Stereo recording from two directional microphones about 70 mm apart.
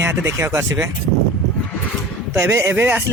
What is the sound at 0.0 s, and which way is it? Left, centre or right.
Speech, right.